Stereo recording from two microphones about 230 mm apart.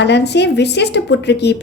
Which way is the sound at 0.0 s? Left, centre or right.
Left.